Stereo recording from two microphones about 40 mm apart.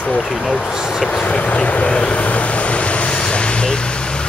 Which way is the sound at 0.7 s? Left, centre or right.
Centre.